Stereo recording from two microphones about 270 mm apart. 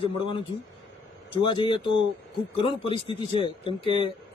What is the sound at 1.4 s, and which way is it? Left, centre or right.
A man's voice, centre.